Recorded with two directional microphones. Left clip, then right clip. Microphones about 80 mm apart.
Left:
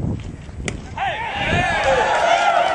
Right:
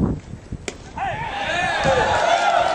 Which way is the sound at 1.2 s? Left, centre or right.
Centre.